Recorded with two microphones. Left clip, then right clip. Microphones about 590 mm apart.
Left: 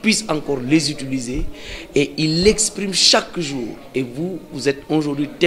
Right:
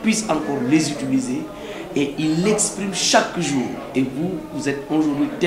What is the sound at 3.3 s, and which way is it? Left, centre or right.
Speech, left.